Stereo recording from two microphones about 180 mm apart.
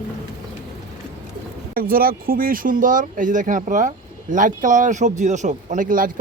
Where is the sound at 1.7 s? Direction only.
55° right (ahead or behind).